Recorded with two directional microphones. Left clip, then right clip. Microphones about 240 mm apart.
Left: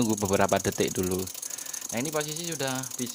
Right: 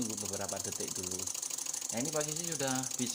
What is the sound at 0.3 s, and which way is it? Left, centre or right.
Speech, left.